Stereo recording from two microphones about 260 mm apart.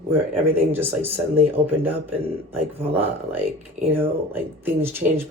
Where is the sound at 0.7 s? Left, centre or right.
Centre.